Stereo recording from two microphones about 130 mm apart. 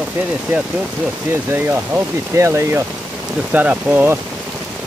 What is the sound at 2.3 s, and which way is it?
Speech, 20° right (ahead or behind).